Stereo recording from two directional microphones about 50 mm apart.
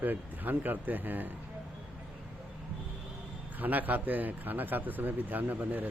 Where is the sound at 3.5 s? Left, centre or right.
Right.